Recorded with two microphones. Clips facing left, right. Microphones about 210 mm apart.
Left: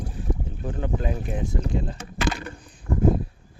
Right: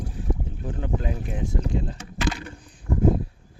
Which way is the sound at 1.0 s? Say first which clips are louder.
Left 2 dB; 45° left (ahead or behind).